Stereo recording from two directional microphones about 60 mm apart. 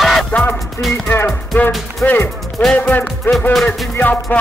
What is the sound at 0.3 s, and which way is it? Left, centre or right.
Music, left.